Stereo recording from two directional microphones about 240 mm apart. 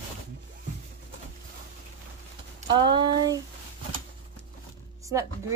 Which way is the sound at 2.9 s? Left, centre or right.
Centre.